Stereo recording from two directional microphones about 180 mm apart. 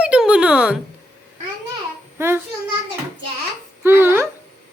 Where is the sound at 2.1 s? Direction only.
15° right (ahead or behind).